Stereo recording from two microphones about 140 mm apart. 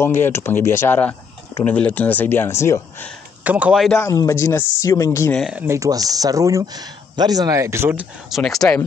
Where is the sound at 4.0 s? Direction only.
20° left (ahead or behind).